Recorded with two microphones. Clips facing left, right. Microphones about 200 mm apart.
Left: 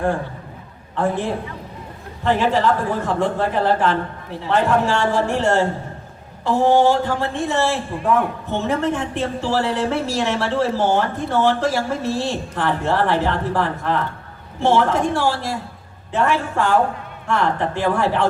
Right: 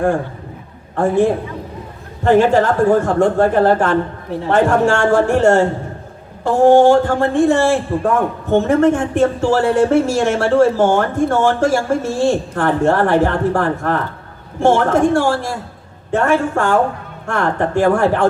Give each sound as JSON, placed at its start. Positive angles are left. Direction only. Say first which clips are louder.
{"t": 0.9, "sound": "a man's voice", "louder": "right 7 dB", "side_deg": -45}